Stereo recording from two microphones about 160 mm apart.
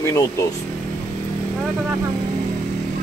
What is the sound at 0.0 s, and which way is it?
Speech, 20° left (ahead or behind).